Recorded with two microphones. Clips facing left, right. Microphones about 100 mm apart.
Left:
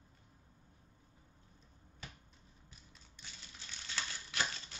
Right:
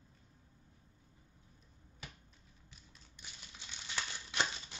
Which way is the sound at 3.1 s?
15° right (ahead or behind).